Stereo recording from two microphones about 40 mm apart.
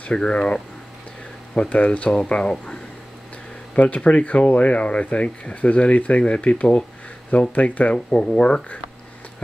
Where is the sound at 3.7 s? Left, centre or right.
Left.